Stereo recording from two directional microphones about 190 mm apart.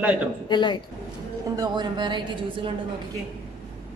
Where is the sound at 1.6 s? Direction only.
25° right (ahead or behind).